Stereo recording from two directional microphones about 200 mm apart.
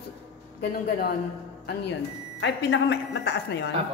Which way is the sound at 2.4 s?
65° left (ahead or behind).